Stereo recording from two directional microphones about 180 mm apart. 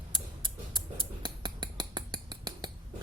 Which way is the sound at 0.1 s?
25° right (ahead or behind).